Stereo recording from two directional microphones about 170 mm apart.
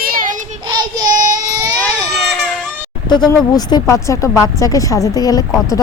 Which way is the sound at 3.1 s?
25° left (ahead or behind).